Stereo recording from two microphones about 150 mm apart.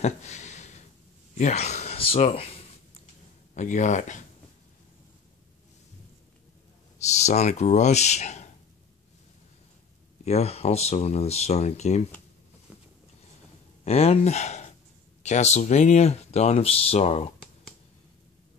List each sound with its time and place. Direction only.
0.0 s a sound: 50° left (ahead or behind)
1.4 s speech: 50° left (ahead or behind)
3.5 s speech: 50° left (ahead or behind)
7.2 s speech: 50° left (ahead or behind)
10.2 s speech: 45° left (ahead or behind)
13.8 s speech: 45° left (ahead or behind)